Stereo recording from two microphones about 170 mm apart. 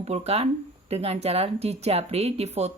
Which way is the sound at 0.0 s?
40° right (ahead or behind).